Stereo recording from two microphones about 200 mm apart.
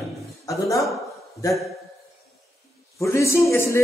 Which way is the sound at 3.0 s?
15° left (ahead or behind).